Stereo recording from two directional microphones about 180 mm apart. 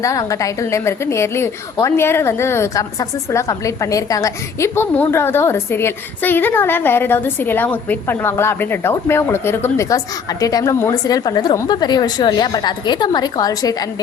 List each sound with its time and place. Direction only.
0.0 s a woman's voice: 20° left (ahead or behind)